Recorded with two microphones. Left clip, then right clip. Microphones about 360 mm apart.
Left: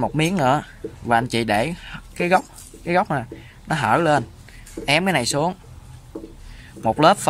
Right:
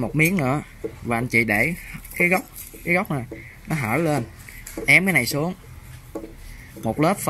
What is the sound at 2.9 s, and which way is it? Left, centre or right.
Speech, left.